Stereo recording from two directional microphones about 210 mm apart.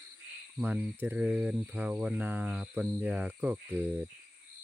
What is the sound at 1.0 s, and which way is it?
Speech, 5° right (ahead or behind).